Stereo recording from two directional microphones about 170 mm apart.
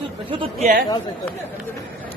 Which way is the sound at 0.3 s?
30° right (ahead or behind).